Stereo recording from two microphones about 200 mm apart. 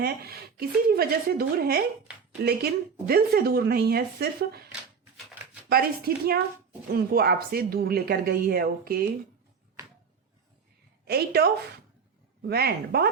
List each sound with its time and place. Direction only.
0.0 s speech: 50° right (ahead or behind)
3.1 s speech: 50° right (ahead or behind)
5.6 s speech: 50° right (ahead or behind)
11.0 s a woman's voice: 50° right (ahead or behind)